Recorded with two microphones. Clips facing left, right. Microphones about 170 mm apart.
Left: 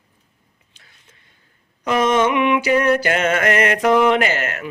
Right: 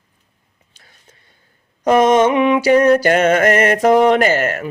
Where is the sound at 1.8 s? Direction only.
45° right (ahead or behind).